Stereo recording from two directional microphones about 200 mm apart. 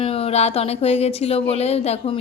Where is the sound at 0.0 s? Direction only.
30° left (ahead or behind).